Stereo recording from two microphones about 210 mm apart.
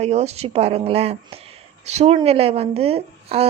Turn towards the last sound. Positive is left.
turn(degrees=-30)  # may be behind; listen again after turning